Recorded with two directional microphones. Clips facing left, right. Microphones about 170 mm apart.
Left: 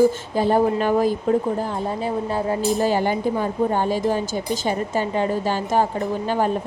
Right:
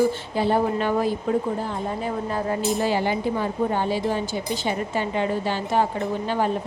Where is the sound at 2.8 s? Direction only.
45° left (ahead or behind).